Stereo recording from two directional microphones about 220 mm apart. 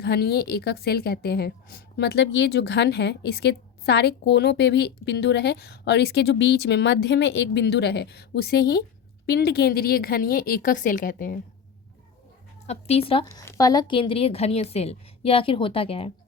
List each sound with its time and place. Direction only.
0.0 s a woman's voice: 45° left (ahead or behind)
12.6 s a woman's voice: 30° left (ahead or behind)
13.2 s a woman's voice: 15° left (ahead or behind)